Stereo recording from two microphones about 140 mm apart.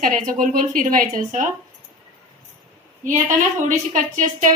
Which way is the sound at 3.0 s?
70° right (ahead or behind).